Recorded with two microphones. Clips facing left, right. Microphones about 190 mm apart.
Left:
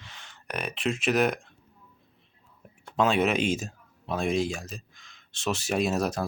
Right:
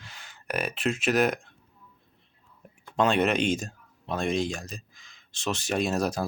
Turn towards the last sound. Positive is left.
turn(degrees=0)  # may be behind; listen again after turning